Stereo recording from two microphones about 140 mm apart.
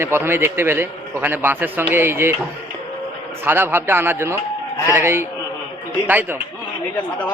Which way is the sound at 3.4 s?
15° right (ahead or behind).